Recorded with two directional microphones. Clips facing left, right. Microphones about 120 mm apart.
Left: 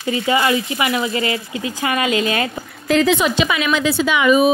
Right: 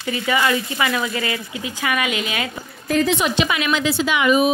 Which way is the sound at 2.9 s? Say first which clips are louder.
Left 3 dB; 90° left.